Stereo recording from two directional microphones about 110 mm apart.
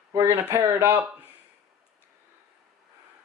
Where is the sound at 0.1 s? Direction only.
30° right (ahead or behind).